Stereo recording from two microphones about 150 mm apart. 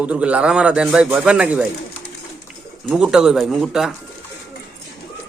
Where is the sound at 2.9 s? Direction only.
5° right (ahead or behind).